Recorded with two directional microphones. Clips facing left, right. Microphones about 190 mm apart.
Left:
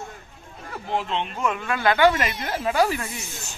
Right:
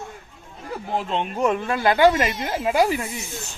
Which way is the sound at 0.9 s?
45° right (ahead or behind).